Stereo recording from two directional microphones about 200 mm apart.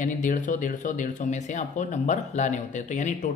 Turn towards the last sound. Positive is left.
turn(degrees=40)  # may be behind; listen again after turning